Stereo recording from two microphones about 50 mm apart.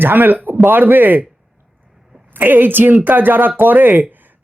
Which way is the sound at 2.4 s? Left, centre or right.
Right.